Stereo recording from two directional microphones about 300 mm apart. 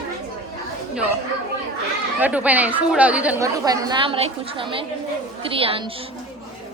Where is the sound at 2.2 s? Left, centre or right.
Centre.